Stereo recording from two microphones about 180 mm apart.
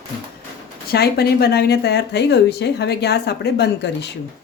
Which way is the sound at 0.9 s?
60° left (ahead or behind).